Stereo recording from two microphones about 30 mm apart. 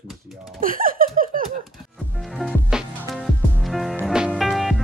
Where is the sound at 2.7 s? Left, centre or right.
Right.